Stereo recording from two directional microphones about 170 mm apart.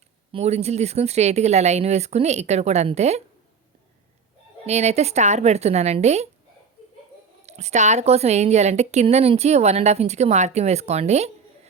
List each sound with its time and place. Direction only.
0.3 s a woman's voice: 35° right (ahead or behind)
4.6 s a woman's voice: 40° right (ahead or behind)
7.4 s a woman's voice: 40° right (ahead or behind)